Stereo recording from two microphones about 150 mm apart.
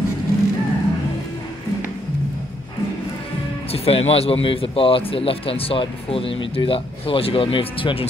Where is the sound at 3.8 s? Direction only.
40° left (ahead or behind).